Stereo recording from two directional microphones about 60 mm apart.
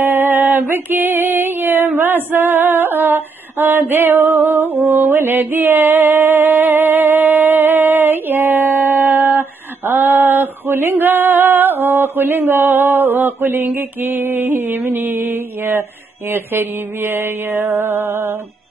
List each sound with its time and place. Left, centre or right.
0.0 s female singing: right
13.7 s mantra: right